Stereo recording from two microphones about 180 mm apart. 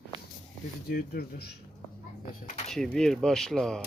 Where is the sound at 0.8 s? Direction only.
60° left (ahead or behind).